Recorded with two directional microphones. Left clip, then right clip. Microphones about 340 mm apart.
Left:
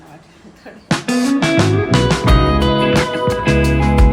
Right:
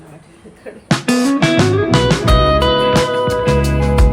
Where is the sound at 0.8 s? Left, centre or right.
Centre.